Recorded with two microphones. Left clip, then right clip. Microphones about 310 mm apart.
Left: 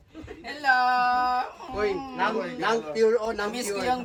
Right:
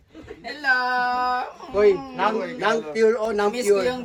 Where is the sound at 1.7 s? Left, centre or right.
Centre.